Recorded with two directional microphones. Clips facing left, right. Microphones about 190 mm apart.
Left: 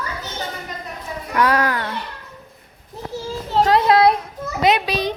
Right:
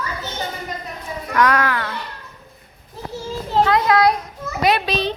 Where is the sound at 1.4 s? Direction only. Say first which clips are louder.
Even; 35° left (ahead or behind).